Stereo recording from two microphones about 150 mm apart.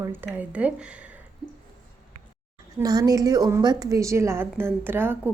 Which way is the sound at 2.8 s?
25° right (ahead or behind).